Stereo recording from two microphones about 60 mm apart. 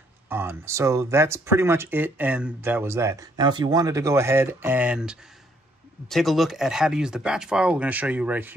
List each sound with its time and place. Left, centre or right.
0.3 s speech: right
0.7 s speech: right
2.6 s speech: right
3.2 s speech: right
4.7 s speech: centre
6.0 s speech: centre; by 8.5 s right